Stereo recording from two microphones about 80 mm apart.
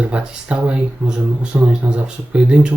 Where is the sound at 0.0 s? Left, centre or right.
Centre.